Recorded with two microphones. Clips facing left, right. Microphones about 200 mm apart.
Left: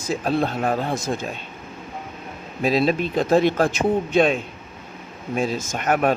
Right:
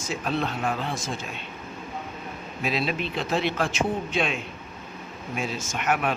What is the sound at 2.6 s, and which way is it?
Speech, 40° left (ahead or behind).